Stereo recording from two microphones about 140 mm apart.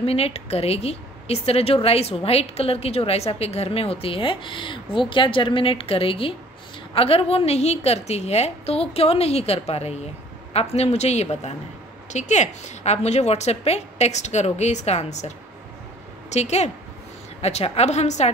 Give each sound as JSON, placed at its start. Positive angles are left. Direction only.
{"t": 0.0, "sound": "speech", "side_deg": 45}